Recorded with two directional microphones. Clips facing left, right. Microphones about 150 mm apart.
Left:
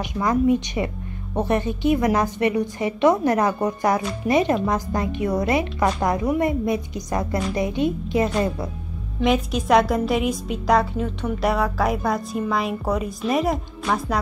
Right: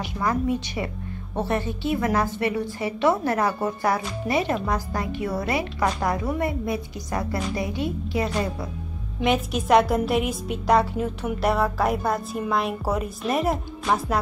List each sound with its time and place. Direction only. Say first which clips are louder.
0.0 s a woman's voice: left 5 dB; 20° left (ahead or behind)
9.2 s a woman's voice: left 2 dB; centre (ahead or behind)